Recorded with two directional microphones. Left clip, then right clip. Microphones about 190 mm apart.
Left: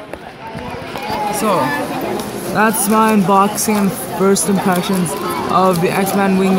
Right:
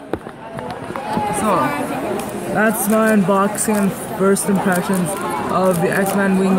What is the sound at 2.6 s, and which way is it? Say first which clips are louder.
Speech: left 3 dB; 5° left (ahead or behind).